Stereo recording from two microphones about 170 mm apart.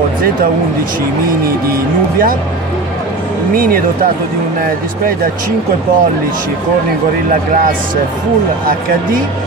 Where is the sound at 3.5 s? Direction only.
55° right (ahead or behind).